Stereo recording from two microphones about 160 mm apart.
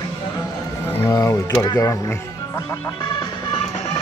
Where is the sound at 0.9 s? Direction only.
15° left (ahead or behind).